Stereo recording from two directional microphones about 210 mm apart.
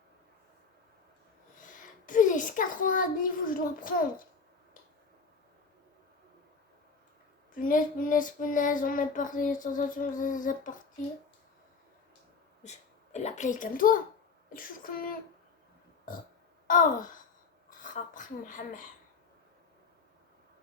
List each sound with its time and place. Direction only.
1.5 s a sound: 40° left (ahead or behind)
7.5 s child singing: 40° left (ahead or behind)
12.6 s a woman's voice: 35° left (ahead or behind)
16.6 s child singing: 40° left (ahead or behind)
17.7 s speech: 40° left (ahead or behind)